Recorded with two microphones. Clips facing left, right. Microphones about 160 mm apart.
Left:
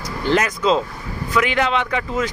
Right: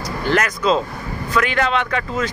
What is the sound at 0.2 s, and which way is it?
Speech, 20° left (ahead or behind).